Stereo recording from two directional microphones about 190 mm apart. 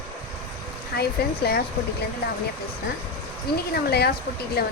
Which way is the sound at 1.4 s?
55° left (ahead or behind).